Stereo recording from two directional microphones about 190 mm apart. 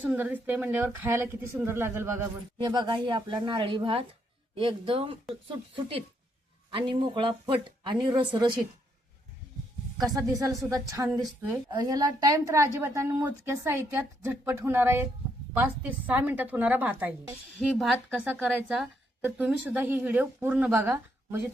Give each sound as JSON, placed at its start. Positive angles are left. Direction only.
{"t": 0.0, "sound": "a woman's voice", "side_deg": -5}
{"t": 2.6, "sound": "speech", "side_deg": -25}
{"t": 10.0, "sound": "a woman's voice", "side_deg": -20}
{"t": 17.7, "sound": "a woman's voice", "side_deg": 5}